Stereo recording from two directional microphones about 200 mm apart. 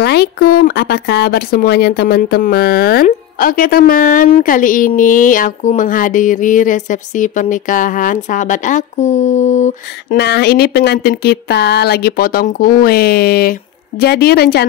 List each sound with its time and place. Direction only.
0.0 s speech: 55° left (ahead or behind); by 10.1 s 35° left (ahead or behind)
10.1 s speech: 55° left (ahead or behind)